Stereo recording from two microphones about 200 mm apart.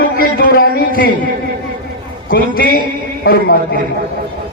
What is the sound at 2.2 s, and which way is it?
A man's voice, 45° left (ahead or behind).